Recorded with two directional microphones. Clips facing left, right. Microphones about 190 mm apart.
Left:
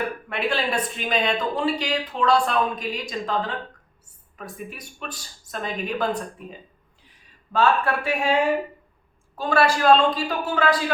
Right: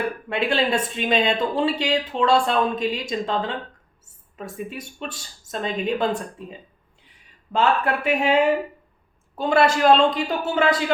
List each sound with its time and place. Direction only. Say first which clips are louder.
0.3 s speech: right 5 dB; 25° right (ahead or behind)
7.5 s speech: even; 20° right (ahead or behind)